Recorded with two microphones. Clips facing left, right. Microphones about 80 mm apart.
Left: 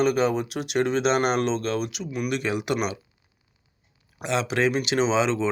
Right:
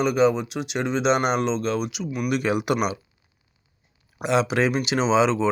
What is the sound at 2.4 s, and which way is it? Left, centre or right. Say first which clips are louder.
Speech: right 5 dB; centre.